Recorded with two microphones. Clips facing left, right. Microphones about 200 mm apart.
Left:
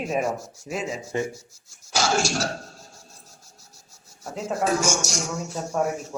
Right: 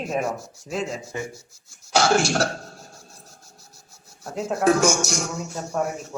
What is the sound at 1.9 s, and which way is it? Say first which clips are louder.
Speech: right 4 dB; 60° right (ahead or behind).